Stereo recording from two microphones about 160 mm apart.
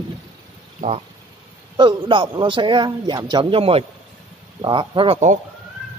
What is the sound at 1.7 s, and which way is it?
Speech, 30° right (ahead or behind).